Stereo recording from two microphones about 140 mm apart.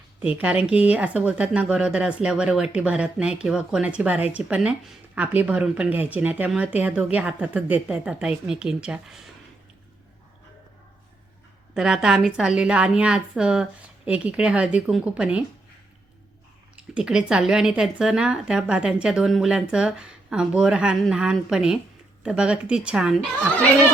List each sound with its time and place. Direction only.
0.3 s speech: 10° right (ahead or behind)
11.7 s speech: 5° right (ahead or behind)
16.7 s speech: 5° right (ahead or behind)